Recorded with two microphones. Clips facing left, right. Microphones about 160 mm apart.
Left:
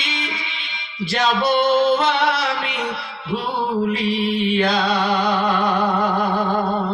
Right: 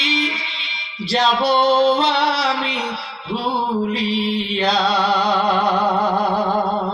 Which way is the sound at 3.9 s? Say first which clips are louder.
Even; 50° left (ahead or behind).